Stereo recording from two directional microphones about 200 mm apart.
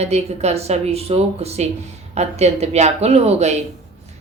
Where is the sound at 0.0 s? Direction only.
30° right (ahead or behind).